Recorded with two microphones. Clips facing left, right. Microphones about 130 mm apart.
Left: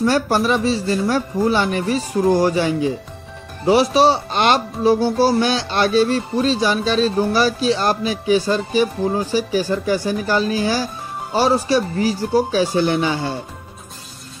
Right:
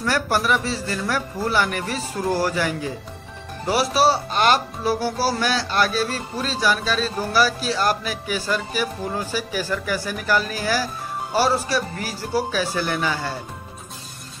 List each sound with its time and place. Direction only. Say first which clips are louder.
0.0 s speech: left 5 dB; 20° left (ahead or behind)